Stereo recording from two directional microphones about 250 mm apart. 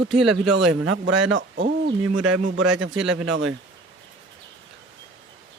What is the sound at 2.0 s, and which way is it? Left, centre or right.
Speech, right.